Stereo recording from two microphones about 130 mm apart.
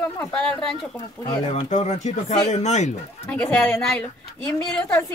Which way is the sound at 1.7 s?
65° left (ahead or behind).